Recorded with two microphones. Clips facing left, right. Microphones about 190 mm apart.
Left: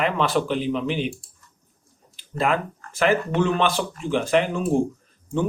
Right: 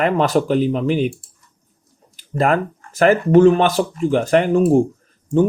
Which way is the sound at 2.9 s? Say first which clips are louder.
Right 8 dB; 45° right (ahead or behind).